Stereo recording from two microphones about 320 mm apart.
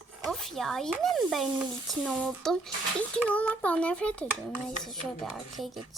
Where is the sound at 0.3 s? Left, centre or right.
Centre.